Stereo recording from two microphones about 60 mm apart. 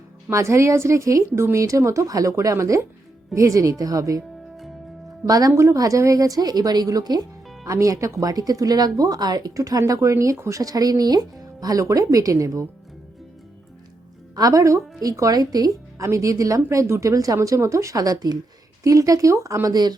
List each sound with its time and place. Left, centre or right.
0.3 s a woman's voice: right
2.0 s speech: right
5.2 s speech: right
5.7 s speech: right
8.2 s speech: right
10.5 s speech: right
14.3 s a woman's voice: right
15.0 s speech: right
16.1 s speech: right
16.6 s a woman's voice: right
18.8 s a woman's voice: right
19.6 s speech: right